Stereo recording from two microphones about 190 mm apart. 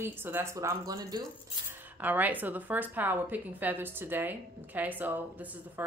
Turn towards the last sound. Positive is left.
turn(degrees=-10)  # may be behind; listen again after turning